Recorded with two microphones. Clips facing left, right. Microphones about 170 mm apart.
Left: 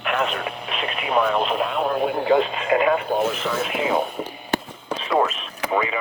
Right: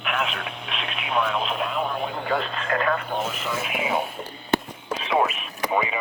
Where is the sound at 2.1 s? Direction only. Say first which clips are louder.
Left 7 dB; 15° left (ahead or behind).